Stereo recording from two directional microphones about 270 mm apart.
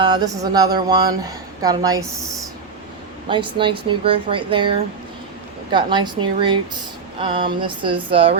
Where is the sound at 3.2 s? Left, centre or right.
Centre.